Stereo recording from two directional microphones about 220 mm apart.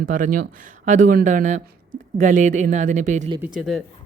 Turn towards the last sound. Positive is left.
turn(degrees=0)  # may be behind; listen again after turning